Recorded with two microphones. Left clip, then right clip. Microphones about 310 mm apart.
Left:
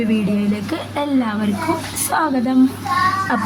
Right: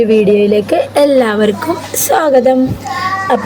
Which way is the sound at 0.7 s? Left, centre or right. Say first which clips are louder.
Right 11 dB; centre.